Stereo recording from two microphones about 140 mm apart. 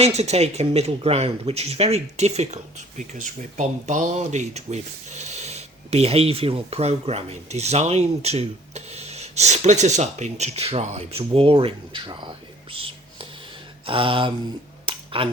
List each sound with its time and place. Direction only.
0.0 s speech: 50° right (ahead or behind)
12.7 s whispering: 40° right (ahead or behind)
13.8 s a sound: 40° right (ahead or behind)